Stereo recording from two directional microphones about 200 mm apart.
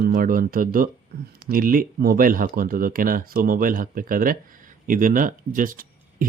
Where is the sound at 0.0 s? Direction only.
45° right (ahead or behind).